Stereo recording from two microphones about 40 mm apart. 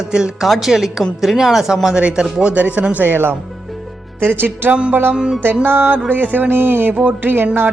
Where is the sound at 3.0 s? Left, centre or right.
Right.